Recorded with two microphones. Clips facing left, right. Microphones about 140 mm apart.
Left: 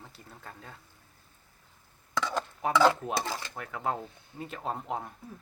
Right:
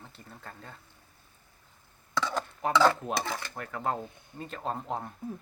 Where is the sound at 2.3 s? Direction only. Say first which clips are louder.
Even; centre (ahead or behind).